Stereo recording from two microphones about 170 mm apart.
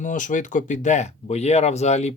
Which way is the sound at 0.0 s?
50° left (ahead or behind).